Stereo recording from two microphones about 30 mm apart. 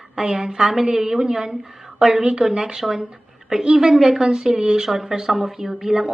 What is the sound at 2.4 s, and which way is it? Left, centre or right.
A woman's voice, right.